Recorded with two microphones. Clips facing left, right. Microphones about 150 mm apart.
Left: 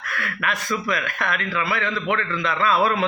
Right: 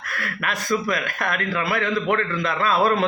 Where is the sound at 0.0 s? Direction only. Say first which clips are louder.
Left 1 dB; 40° right (ahead or behind).